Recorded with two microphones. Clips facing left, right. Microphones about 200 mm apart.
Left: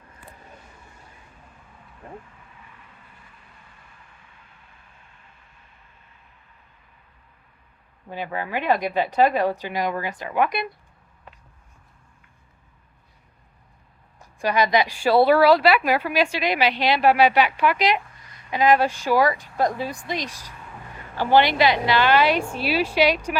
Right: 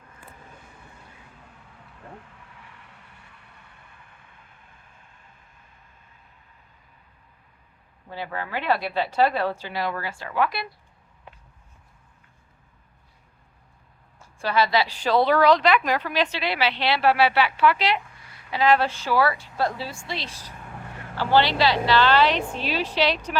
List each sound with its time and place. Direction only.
2.6 s vehicle: 75° right (ahead or behind)
8.1 s a woman's voice: 15° left (ahead or behind)
14.2 s a woman's voice: 15° left (ahead or behind)